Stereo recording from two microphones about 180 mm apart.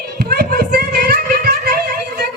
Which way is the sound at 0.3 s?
60° right (ahead or behind).